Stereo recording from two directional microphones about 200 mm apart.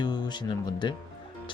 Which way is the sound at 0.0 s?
20° left (ahead or behind).